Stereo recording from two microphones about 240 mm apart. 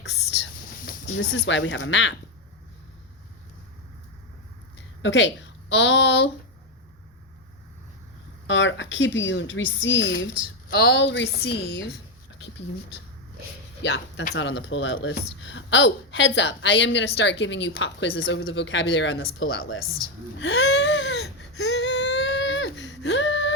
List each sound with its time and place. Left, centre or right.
0.0 s whispering: left
1.1 s speech: left
5.0 s a woman's voice: left
8.4 s speech: left
13.8 s speech: left
20.4 s baby cry: left